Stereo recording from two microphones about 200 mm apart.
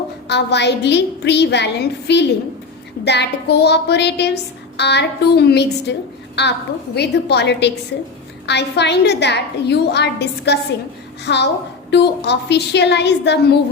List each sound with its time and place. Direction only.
0.3 s a woman's voice: 60° left (ahead or behind)